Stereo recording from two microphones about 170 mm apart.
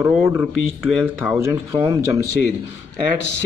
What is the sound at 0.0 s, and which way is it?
Speech, 10° right (ahead or behind).